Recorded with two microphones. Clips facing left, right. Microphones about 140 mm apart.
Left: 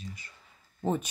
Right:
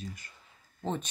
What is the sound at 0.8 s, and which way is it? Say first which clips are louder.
Speech: left 4 dB; 10° left (ahead or behind).